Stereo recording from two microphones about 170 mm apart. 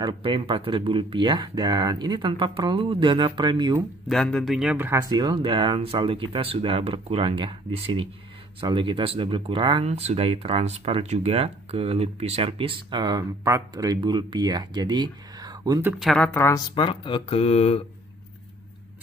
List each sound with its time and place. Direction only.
0.0 s speech: 30° right (ahead or behind)
4.1 s a man's voice: 5° left (ahead or behind); by 5.0 s 10° right (ahead or behind)
5.1 s speech: 25° right (ahead or behind)
16.0 s a man's voice: centre (ahead or behind)
16.3 s speech: 15° left (ahead or behind)
16.7 s speech: 30° left (ahead or behind)